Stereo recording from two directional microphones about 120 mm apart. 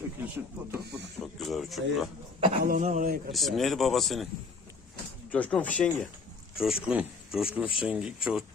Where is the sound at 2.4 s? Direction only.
65° right (ahead or behind); by 3.1 s 80° right.